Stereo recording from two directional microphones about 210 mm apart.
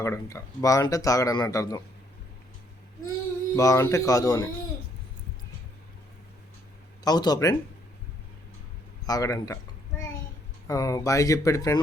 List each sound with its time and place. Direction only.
0.0 s speech: 15° left (ahead or behind)
3.5 s speech: 15° left (ahead or behind)
7.0 s speech: 20° left (ahead or behind)
9.0 s speech: 15° left (ahead or behind)
10.7 s speech: 15° left (ahead or behind)